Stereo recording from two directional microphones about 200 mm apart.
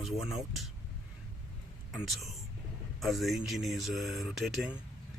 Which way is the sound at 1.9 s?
Centre (ahead or behind).